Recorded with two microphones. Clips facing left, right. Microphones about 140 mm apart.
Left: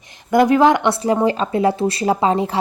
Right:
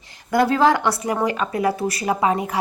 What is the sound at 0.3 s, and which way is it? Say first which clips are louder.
A woman's voice: left 4 dB; 20° left (ahead or behind).